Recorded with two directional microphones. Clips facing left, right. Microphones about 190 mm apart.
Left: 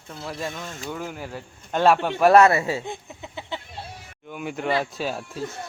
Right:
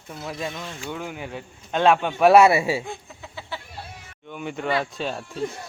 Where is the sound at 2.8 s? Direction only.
20° left (ahead or behind).